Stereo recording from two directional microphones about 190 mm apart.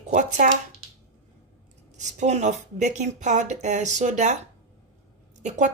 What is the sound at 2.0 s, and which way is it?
Speech, 35° right (ahead or behind).